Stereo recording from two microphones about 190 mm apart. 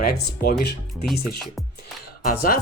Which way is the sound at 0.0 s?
50° left (ahead or behind).